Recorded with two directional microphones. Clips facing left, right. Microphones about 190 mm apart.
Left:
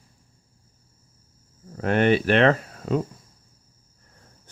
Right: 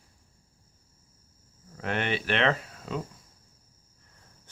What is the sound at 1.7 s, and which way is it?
Speech, 45° left (ahead or behind).